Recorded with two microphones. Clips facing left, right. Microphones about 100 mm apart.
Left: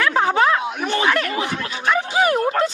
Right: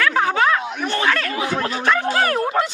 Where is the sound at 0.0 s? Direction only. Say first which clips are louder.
Left 1 dB; 25° left (ahead or behind).